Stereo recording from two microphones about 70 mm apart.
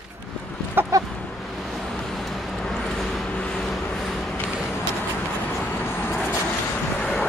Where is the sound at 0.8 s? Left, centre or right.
Right.